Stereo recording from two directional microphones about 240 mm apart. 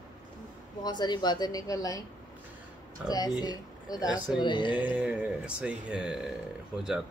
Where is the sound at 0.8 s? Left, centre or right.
Centre.